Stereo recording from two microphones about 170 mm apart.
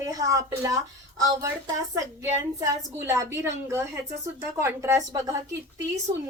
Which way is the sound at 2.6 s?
15° right (ahead or behind).